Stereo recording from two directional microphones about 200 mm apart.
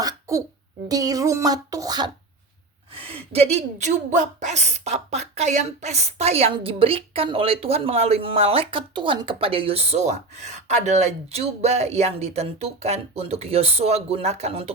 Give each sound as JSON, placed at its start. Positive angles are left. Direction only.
{"t": 0.0, "sound": "cough", "side_deg": -15}
{"t": 0.9, "sound": "a woman's voice", "side_deg": -20}